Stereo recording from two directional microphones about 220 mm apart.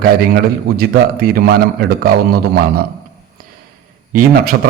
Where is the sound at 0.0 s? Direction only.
45° right (ahead or behind).